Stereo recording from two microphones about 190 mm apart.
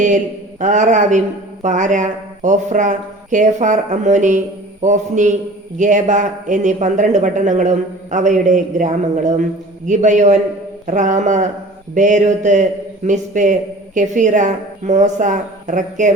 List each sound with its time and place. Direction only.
0.6 s a man's voice: 40° right (ahead or behind)